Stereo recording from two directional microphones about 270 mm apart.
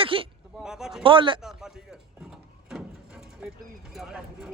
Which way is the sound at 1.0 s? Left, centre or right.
Centre.